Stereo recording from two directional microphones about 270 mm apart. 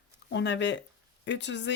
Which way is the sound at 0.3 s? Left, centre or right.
Left.